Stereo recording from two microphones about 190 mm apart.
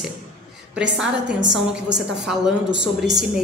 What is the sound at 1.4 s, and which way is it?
Speech, 70° right (ahead or behind).